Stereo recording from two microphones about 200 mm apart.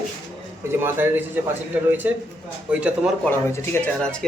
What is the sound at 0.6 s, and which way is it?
A man's voice, 10° right (ahead or behind).